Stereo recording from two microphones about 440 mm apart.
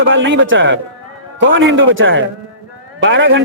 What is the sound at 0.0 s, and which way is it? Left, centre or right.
A man's voice, right.